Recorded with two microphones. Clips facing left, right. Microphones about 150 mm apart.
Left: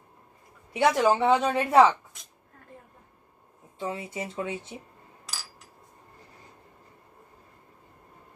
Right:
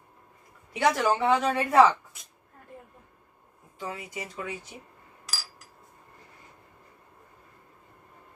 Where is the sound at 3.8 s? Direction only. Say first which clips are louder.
Left 4 dB; 25° left (ahead or behind).